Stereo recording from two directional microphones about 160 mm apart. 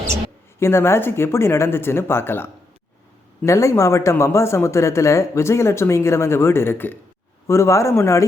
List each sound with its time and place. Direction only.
0.6 s speech: 15° left (ahead or behind)